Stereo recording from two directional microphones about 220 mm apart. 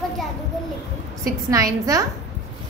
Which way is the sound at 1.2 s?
15° right (ahead or behind).